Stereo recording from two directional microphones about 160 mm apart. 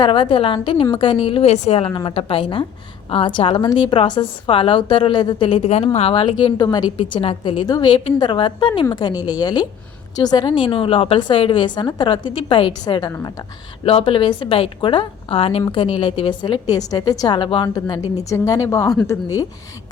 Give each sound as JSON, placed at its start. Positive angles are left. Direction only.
{"t": 0.0, "sound": "a woman's voice", "side_deg": 30}
{"t": 9.1, "sound": "a woman's voice", "side_deg": -10}
{"t": 9.4, "sound": "a woman's voice", "side_deg": 25}
{"t": 13.8, "sound": "a woman's voice", "side_deg": 35}